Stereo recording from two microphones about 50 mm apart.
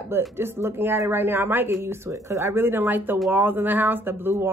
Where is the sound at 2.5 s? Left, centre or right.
Right.